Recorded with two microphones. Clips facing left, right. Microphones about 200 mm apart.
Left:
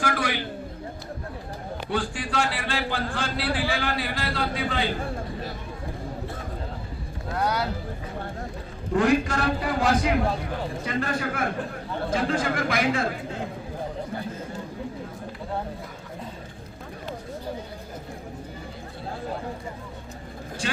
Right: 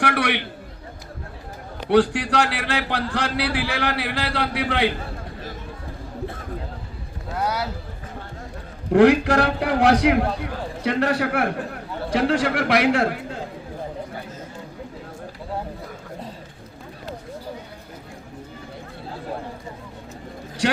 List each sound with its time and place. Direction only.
0.0 s a sound: 70° right (ahead or behind)
1.9 s a man's voice: 70° right (ahead or behind)
7.3 s speech: 5° right (ahead or behind)
8.9 s a man's voice: 65° right (ahead or behind)